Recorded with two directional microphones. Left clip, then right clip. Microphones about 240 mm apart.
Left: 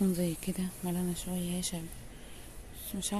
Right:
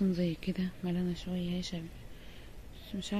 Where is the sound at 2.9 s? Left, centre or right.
Centre.